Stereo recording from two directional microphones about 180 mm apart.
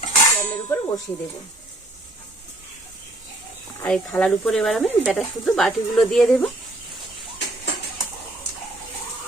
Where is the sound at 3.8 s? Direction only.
5° left (ahead or behind).